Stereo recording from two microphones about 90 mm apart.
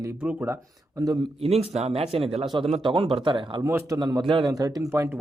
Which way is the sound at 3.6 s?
30° right (ahead or behind).